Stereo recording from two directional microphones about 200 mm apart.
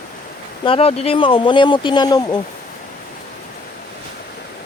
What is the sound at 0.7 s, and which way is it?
Speech, 30° left (ahead or behind).